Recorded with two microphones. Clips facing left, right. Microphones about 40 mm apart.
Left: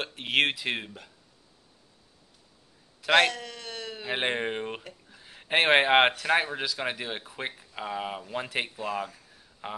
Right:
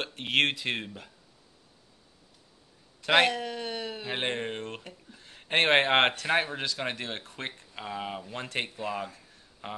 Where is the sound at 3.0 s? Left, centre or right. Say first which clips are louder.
Left 1 dB; centre.